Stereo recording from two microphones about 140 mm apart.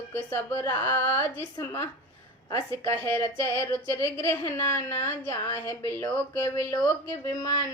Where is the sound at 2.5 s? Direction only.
20° left (ahead or behind).